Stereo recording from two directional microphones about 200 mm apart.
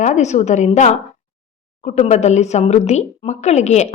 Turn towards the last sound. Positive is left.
turn(degrees=35)  # may be behind; listen again after turning